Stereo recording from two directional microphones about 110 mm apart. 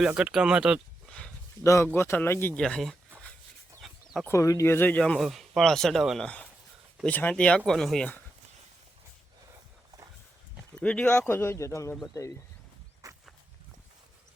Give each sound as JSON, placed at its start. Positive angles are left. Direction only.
{"t": 0.0, "sound": "speech", "side_deg": -5}
{"t": 1.0, "sound": "a sound", "side_deg": 10}
{"t": 1.6, "sound": "speech", "side_deg": 25}
{"t": 2.6, "sound": "speech", "side_deg": 5}
{"t": 3.8, "sound": "chicken", "side_deg": 0}
{"t": 4.3, "sound": "speech", "side_deg": 30}
{"t": 6.2, "sound": "speech", "side_deg": 10}
{"t": 10.8, "sound": "speech", "side_deg": 10}
{"t": 11.3, "sound": "speech", "side_deg": 20}
{"t": 13.0, "sound": "walk", "side_deg": -30}